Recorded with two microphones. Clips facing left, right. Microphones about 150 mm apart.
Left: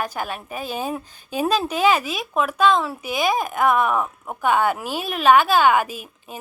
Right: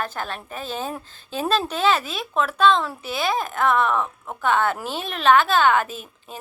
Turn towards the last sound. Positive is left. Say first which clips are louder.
# left 1 dB
turn(degrees=10)  # may be behind; listen again after turning